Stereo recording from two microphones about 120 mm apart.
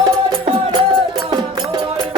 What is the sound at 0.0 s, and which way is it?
Music, 40° right (ahead or behind).